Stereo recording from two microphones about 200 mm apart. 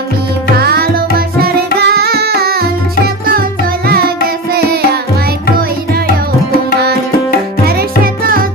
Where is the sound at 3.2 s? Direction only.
45° right (ahead or behind).